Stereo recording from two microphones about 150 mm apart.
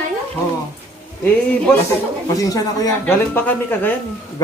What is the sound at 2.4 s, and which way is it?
Speech, 25° left (ahead or behind).